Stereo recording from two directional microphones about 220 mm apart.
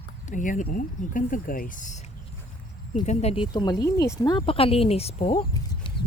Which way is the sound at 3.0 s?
25° left (ahead or behind).